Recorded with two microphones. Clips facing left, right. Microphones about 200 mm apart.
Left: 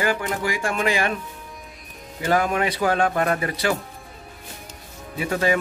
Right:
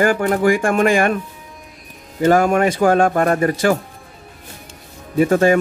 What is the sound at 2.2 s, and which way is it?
Speech, 45° right (ahead or behind).